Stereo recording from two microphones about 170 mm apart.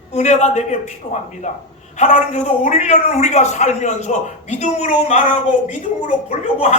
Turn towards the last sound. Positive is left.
turn(degrees=45)  # may be behind; listen again after turning